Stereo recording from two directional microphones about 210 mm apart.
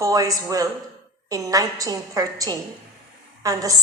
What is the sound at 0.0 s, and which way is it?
A woman's voice, 15° right (ahead or behind).